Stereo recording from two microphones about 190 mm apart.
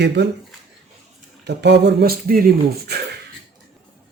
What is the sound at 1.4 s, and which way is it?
Speech, 60° right (ahead or behind).